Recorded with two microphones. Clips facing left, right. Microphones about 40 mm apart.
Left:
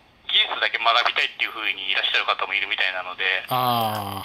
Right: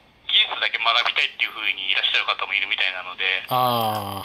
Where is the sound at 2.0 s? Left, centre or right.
Right.